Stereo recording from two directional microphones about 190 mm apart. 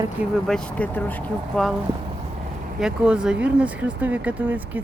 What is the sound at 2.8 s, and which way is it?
Speech, 5° right (ahead or behind).